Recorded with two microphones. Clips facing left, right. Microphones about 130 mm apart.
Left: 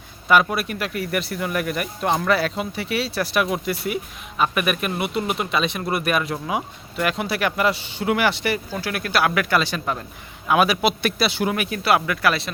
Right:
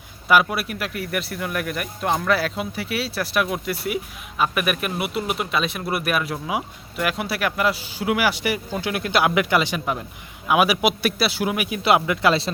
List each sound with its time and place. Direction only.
0.3 s a man's voice: 5° right (ahead or behind)
11.8 s speech: 20° right (ahead or behind)